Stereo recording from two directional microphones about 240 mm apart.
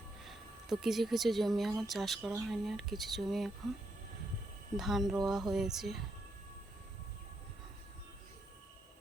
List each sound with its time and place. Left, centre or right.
0.3 s speech: centre
4.8 s speech: centre